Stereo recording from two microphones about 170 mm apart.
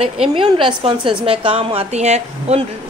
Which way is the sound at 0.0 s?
35° right (ahead or behind).